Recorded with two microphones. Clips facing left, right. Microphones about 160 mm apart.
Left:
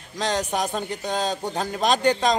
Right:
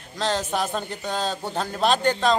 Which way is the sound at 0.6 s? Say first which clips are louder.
Left 1 dB; 40° left (ahead or behind).